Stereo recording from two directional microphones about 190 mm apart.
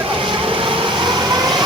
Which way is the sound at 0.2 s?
25° right (ahead or behind).